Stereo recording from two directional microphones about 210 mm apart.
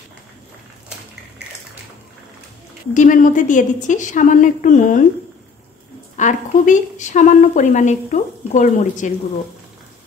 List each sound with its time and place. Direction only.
2.9 s a woman's voice: 40° left (ahead or behind)
6.1 s a woman's voice: 35° left (ahead or behind)